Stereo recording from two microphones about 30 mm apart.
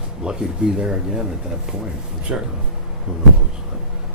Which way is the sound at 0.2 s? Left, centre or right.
Right.